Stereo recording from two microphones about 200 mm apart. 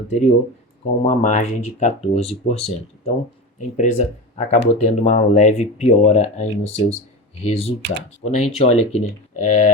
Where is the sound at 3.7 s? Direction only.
35° left (ahead or behind).